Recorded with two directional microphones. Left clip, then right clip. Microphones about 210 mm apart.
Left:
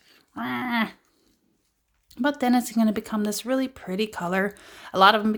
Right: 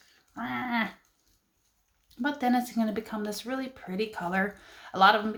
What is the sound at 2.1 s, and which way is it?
Speech, 45° left (ahead or behind).